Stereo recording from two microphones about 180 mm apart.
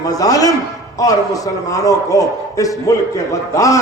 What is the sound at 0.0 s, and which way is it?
A man's voice, 20° left (ahead or behind).